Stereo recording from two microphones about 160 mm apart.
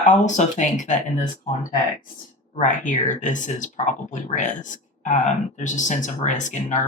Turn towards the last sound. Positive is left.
turn(degrees=50)  # may be behind; listen again after turning